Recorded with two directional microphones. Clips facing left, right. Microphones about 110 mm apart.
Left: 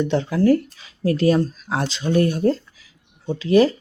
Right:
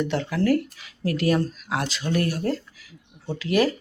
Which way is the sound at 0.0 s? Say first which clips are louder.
Left 5 dB; 20° left (ahead or behind).